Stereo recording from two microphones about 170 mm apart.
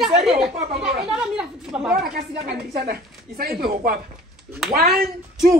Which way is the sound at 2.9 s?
60° right (ahead or behind).